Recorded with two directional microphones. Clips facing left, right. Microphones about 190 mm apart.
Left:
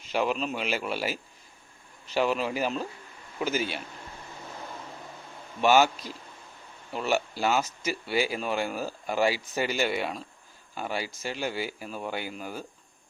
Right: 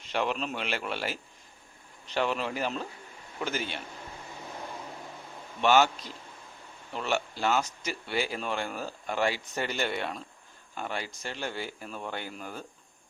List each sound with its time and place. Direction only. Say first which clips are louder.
0.1 s speech: left 3 dB; 5° left (ahead or behind)
5.6 s speech: left 2 dB; 10° left (ahead or behind)